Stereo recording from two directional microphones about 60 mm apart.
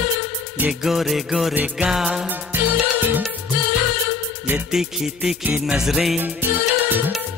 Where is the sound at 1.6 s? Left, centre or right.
Right.